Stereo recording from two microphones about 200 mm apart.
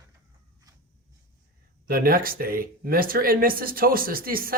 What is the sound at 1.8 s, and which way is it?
Speech, 45° right (ahead or behind).